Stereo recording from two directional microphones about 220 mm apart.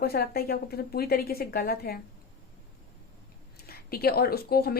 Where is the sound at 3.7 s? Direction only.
45° left (ahead or behind).